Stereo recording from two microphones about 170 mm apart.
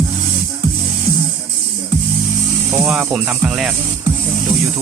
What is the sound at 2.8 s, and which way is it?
Speech, 5° right (ahead or behind).